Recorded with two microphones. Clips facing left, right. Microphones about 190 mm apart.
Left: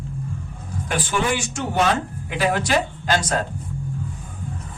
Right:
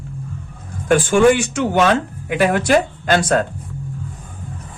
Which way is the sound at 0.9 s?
50° right (ahead or behind).